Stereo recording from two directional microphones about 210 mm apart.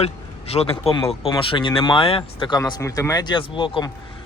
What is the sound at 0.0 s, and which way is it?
Speech, 30° left (ahead or behind).